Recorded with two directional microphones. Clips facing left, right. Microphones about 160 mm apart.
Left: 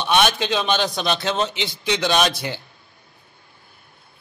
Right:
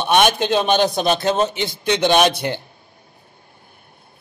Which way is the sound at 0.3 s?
50° right (ahead or behind).